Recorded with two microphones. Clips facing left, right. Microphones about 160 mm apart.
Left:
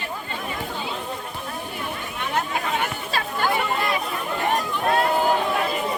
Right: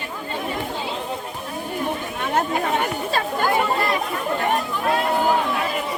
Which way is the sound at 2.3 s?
45° right (ahead or behind).